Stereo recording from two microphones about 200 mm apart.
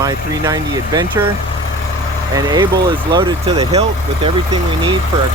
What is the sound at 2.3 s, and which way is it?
Speech, 20° right (ahead or behind).